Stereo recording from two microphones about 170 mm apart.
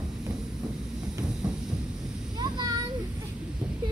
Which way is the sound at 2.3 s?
25° right (ahead or behind).